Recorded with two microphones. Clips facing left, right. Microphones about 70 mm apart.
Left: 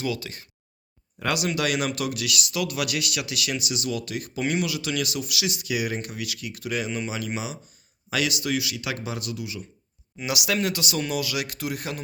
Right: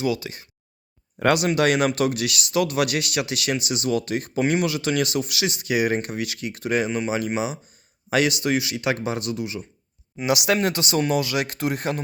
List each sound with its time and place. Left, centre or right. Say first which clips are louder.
0.0 s speech: right 5 dB; centre
1.2 s speech: right 6 dB; right